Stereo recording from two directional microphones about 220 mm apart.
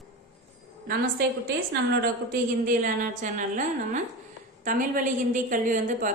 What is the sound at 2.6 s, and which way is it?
A woman's voice, 35° right (ahead or behind).